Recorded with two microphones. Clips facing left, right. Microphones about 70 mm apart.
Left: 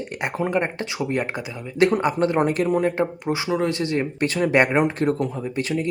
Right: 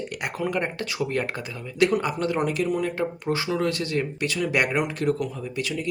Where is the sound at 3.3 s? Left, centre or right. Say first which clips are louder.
Even; centre.